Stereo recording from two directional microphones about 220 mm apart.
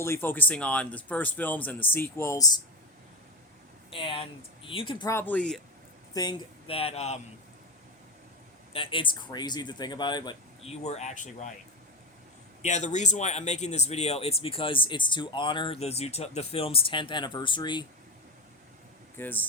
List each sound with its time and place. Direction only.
0.0 s speech: 10° left (ahead or behind)
3.9 s speech: 25° left (ahead or behind); by 5.5 s 5° left (ahead or behind)
6.1 s speech: 20° left (ahead or behind)
8.7 s speech: 25° left (ahead or behind)
12.6 s speech: 30° left (ahead or behind)
19.1 s speech: 10° left (ahead or behind)